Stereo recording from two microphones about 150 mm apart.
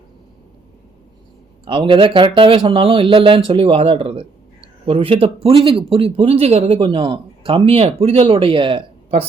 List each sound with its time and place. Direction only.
1.6 s speech: 35° right (ahead or behind)